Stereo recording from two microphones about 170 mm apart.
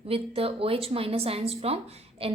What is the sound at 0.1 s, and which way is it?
Speech, 35° right (ahead or behind).